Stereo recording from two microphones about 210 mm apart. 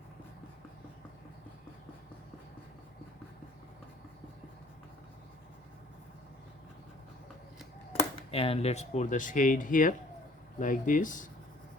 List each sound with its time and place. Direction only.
8.3 s speech: 30° left (ahead or behind)